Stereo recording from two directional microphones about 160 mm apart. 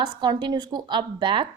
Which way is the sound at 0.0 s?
30° right (ahead or behind).